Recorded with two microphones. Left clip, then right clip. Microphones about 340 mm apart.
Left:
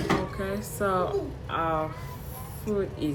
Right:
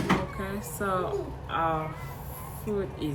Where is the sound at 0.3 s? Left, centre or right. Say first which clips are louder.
Left 3 dB; centre.